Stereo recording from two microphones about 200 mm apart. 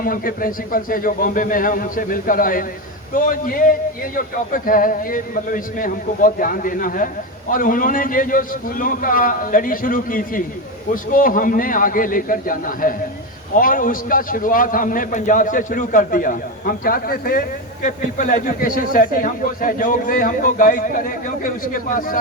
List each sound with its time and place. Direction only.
0.0 s speech: 45° left (ahead or behind)